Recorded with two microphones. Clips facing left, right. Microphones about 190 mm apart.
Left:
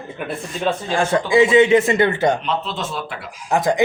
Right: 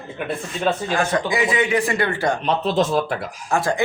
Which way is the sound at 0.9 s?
25° left (ahead or behind).